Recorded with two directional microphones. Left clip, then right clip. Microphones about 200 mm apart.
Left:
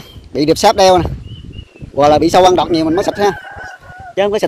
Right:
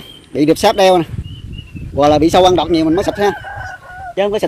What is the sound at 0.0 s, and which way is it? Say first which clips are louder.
Speech: right 1 dB; 5° left (ahead or behind).